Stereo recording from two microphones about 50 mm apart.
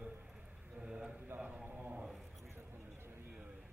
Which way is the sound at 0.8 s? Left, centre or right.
Centre.